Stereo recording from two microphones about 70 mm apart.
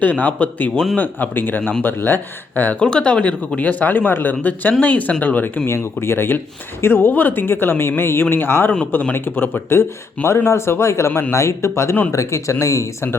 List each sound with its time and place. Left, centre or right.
0.0 s speech: left
5.6 s speech: left